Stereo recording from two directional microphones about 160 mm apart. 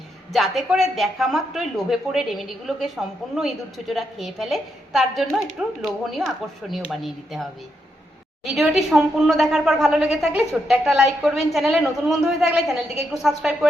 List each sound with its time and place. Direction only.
0.3 s speech: centre (ahead or behind)
8.4 s speech: 5° right (ahead or behind)